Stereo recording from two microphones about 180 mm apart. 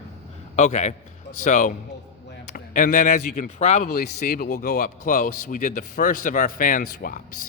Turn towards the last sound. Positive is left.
turn(degrees=50)  # may be behind; listen again after turning